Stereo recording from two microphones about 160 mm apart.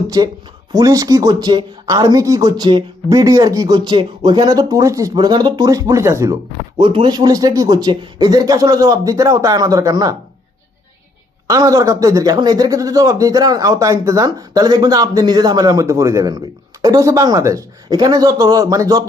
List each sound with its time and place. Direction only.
0.1 s speech: 25° right (ahead or behind)
6.7 s speech: 30° right (ahead or behind)
11.4 s speech: 20° right (ahead or behind)